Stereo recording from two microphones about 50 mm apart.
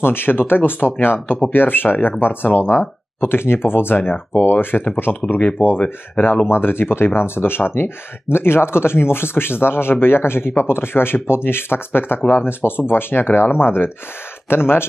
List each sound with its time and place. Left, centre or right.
0.0 s speech: left
5.1 s speech: left
6.5 s speech: left